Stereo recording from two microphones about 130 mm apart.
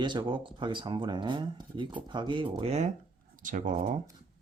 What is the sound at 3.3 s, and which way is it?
Speech, 90° right.